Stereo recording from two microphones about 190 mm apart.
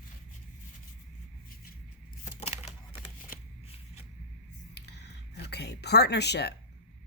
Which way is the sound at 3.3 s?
45° left (ahead or behind).